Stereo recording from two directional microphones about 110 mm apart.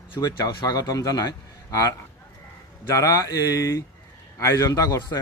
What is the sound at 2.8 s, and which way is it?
Speech, 30° left (ahead or behind).